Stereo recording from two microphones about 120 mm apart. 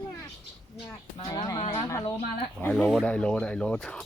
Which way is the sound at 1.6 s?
45° left (ahead or behind).